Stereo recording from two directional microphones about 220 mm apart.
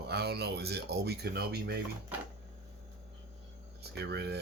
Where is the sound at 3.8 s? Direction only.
50° right (ahead or behind).